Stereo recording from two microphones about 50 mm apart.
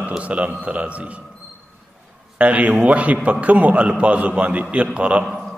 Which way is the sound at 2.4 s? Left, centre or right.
Right.